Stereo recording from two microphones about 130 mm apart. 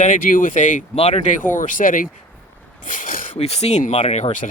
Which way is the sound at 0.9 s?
55° left (ahead or behind).